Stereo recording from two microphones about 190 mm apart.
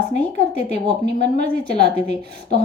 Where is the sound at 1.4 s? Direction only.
60° right (ahead or behind).